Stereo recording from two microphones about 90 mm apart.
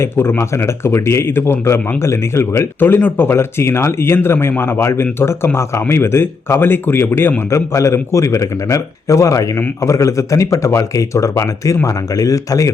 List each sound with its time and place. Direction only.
0.0 s a man's voice: 25° left (ahead or behind)